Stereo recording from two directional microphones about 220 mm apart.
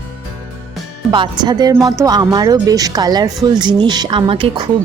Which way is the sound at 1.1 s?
20° right (ahead or behind).